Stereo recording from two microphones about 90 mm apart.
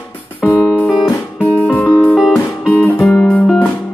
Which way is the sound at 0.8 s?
Centre (ahead or behind).